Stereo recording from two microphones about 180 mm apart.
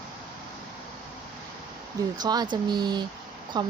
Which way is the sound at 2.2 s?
20° right (ahead or behind).